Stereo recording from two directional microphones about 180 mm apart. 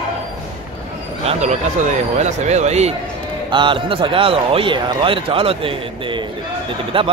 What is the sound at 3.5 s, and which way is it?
A man's voice, 25° right (ahead or behind).